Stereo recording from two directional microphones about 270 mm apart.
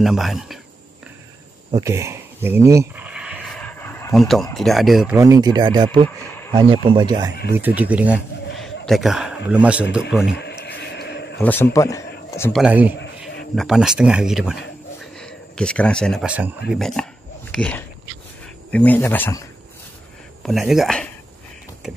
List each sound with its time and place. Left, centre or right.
0.0 s speech: centre
1.7 s a sound: centre
4.6 s speech: centre
6.0 s a sound: centre
6.5 s speech: centre
10.3 s a sound: left
11.3 s speech: centre
12.6 s speech: centre
20.4 s speech: centre